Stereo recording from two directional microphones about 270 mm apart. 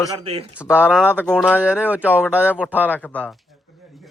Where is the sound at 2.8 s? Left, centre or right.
Centre.